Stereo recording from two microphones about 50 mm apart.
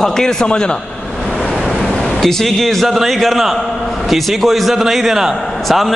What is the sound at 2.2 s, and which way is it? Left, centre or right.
A man's voice, centre.